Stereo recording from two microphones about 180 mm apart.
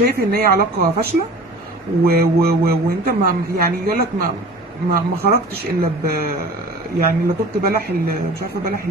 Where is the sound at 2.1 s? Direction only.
60° right (ahead or behind).